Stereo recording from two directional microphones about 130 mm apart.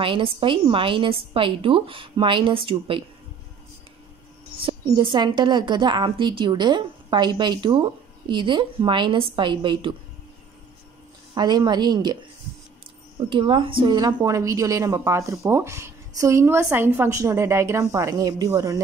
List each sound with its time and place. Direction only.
0.0 s a woman's voice: 40° right (ahead or behind)
4.8 s a woman's voice: 35° right (ahead or behind)
11.3 s a woman's voice: 35° right (ahead or behind)
13.3 s a woman's voice: 40° right (ahead or behind)